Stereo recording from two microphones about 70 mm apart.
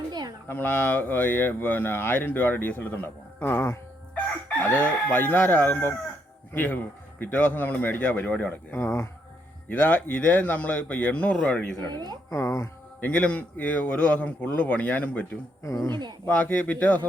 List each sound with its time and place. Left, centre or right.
0.1 s a sound: right
0.4 s speech: left
4.1 s chicken: left
5.1 s speech: left
8.7 s speech: left
9.6 s speech: left
11.9 s speech: right
12.3 s speech: left
13.0 s speech: centre
15.6 s speech: left
16.3 s speech: left